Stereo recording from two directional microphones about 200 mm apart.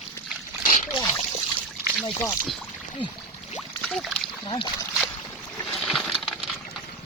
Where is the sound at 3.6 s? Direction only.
Centre (ahead or behind).